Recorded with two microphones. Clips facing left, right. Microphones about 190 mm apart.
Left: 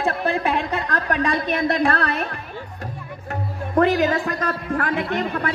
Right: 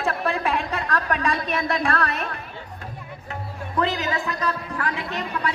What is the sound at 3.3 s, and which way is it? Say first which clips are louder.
A man's voice: left 5 dB; 50° left (ahead or behind).